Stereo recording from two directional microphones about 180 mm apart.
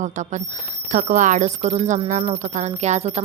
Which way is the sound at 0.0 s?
40° right (ahead or behind).